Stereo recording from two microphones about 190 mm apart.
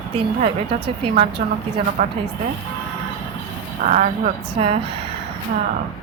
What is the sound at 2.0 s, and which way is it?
Speech, 35° right (ahead or behind).